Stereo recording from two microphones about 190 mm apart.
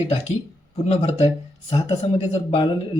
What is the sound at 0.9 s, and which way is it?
Speech, 30° left (ahead or behind).